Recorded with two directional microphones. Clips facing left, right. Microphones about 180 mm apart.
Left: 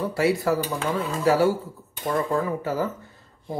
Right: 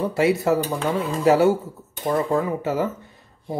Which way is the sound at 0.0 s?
20° right (ahead or behind).